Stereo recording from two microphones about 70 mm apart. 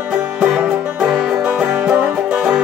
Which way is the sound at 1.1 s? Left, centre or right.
Centre.